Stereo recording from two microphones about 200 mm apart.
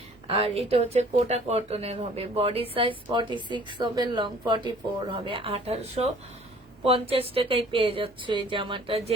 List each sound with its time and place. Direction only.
0.3 s speech: 30° right (ahead or behind)